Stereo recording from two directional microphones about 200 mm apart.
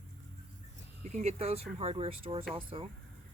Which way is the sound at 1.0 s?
35° right (ahead or behind).